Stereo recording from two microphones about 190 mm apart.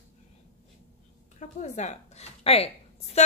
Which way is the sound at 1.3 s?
40° left (ahead or behind).